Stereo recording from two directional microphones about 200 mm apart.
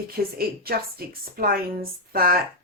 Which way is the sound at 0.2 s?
50° right (ahead or behind).